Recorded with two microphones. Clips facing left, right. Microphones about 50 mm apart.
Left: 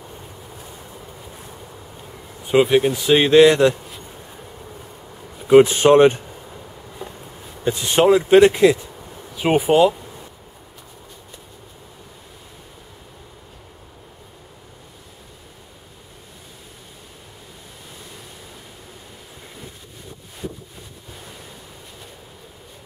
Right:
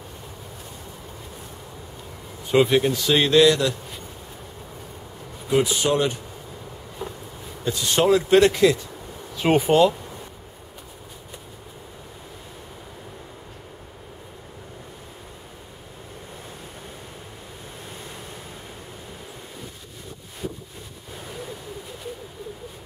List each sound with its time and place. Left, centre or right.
2.4 s speech: centre; by 3.7 s left
5.5 s speech: left
7.6 s speech: left
9.4 s speech: centre